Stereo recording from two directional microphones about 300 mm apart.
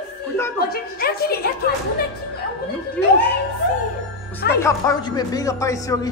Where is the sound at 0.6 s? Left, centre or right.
Left.